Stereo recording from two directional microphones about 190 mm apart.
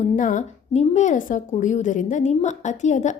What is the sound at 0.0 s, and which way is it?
A woman's voice, 40° left (ahead or behind).